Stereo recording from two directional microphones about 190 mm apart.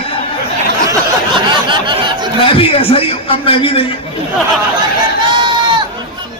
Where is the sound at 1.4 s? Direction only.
25° right (ahead or behind).